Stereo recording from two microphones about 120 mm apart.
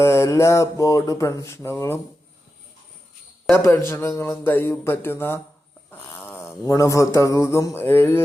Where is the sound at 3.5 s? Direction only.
20° left (ahead or behind).